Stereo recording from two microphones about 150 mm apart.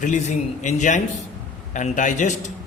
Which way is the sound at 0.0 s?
55° left (ahead or behind).